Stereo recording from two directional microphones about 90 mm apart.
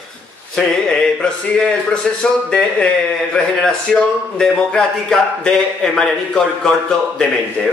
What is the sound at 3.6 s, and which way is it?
Speech, 10° left (ahead or behind).